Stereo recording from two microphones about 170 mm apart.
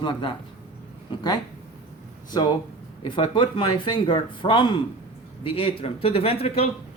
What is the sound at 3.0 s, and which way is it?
Speech, 30° left (ahead or behind).